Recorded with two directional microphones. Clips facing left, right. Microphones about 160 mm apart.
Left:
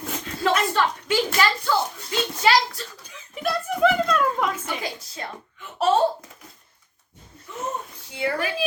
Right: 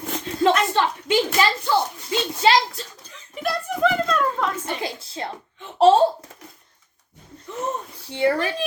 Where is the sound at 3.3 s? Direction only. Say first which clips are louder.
Left 1 dB; centre (ahead or behind).